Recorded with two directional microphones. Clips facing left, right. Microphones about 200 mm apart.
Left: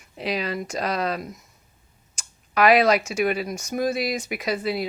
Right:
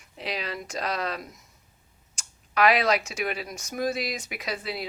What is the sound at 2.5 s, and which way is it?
Speech, 45° left (ahead or behind).